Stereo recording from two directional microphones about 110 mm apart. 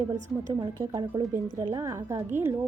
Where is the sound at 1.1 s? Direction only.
30° right (ahead or behind).